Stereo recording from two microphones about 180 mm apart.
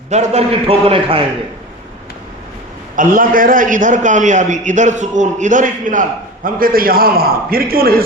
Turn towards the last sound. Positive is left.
turn(degrees=-55)  # may be behind; listen again after turning